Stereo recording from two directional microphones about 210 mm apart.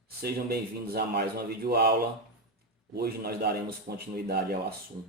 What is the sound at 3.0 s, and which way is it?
Speech, 50° right (ahead or behind).